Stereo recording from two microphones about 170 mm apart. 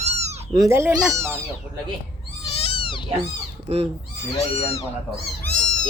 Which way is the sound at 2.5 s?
35° left (ahead or behind).